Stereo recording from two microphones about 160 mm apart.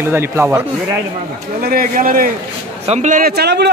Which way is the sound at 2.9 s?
50° right (ahead or behind).